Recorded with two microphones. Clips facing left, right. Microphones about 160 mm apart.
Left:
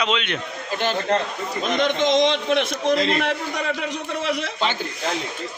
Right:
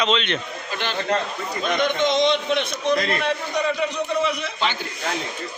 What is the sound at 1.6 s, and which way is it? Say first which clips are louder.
A man's voice: left 1 dB; 90° left.